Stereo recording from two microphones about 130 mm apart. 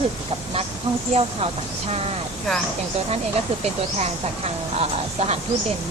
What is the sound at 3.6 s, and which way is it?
Speech, 55° right (ahead or behind).